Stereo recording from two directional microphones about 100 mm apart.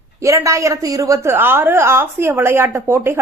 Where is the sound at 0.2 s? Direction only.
30° right (ahead or behind).